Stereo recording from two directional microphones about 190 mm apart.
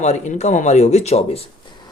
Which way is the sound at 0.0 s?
35° left (ahead or behind).